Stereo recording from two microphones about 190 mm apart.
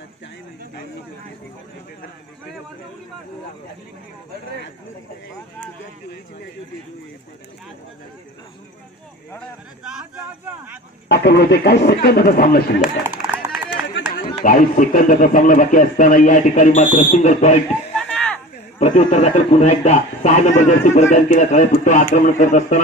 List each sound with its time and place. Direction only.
9.8 s speech: 5° right (ahead or behind)
11.1 s speech: 60° left (ahead or behind)
12.8 s run: 5° right (ahead or behind)
13.7 s run: 65° left (ahead or behind)
14.1 s speech: 45° left (ahead or behind)
17.9 s a sound: 5° left (ahead or behind)
18.8 s a man's voice: 40° left (ahead or behind)